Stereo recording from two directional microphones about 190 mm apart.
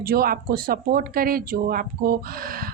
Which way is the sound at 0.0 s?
50° right (ahead or behind).